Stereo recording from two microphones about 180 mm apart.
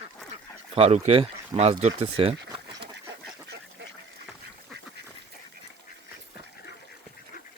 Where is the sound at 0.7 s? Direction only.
35° right (ahead or behind).